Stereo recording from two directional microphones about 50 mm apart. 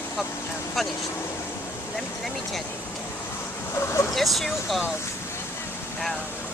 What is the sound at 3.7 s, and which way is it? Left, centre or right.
Speech, left.